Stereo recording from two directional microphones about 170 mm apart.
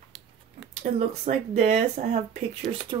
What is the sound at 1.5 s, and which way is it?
Speech, 45° right (ahead or behind).